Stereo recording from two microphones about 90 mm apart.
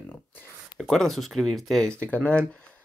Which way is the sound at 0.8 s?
5° left (ahead or behind).